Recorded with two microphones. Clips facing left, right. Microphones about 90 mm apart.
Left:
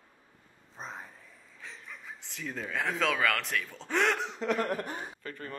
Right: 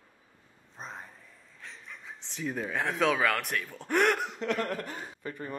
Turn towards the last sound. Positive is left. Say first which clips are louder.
# right 3 dB
turn(degrees=-15)  # may be behind; listen again after turning